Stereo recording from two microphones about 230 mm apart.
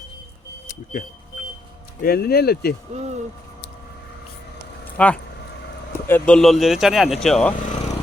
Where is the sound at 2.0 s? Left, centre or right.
Left.